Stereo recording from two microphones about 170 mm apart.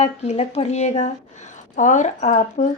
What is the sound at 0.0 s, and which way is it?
Speech, 40° left (ahead or behind).